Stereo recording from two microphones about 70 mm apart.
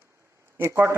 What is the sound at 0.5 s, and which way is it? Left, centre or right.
Speech, right.